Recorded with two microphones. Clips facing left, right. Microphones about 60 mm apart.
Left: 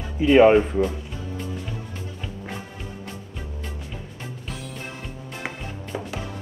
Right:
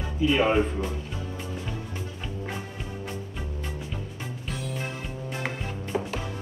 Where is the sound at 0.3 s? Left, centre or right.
Left.